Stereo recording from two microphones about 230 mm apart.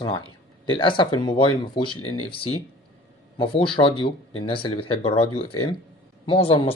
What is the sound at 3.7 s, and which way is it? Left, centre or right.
Speech, left.